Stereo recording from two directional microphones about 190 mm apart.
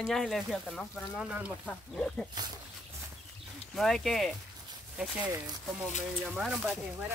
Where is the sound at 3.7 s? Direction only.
Centre (ahead or behind).